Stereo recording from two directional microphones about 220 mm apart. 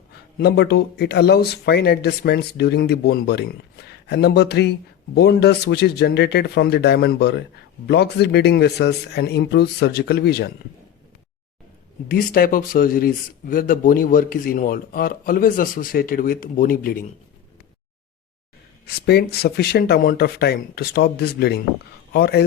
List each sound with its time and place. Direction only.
0.3 s speech: 45° left (ahead or behind)
12.0 s speech: 40° left (ahead or behind)
19.0 s speech: 45° left (ahead or behind)